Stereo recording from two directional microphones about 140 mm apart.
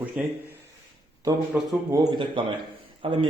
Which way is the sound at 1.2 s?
25° right (ahead or behind).